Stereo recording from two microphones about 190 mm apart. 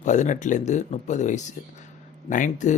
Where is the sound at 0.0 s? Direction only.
40° left (ahead or behind).